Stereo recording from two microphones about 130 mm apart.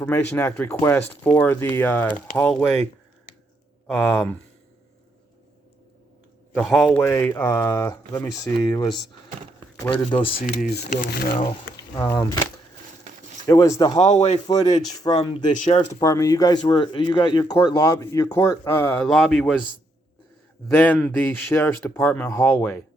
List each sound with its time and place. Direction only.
0.0 s speech: 10° left (ahead or behind)
3.8 s speech: 10° left (ahead or behind)
6.6 s a man's voice: centre (ahead or behind)
7.0 s speech: 20° left (ahead or behind)
9.9 s speech: 40° left (ahead or behind)
10.4 s speech: 75° left (ahead or behind)
12.1 s speech: 30° left (ahead or behind)
13.5 s speech: 25° left (ahead or behind)
14.2 s speech: 50° left (ahead or behind)
14.4 s speech: 30° left (ahead or behind)
15.5 s speech: 65° left (ahead or behind)
15.9 s speech: 25° left (ahead or behind)
19.0 s a man's voice: centre (ahead or behind)
20.7 s speech: 10° left (ahead or behind)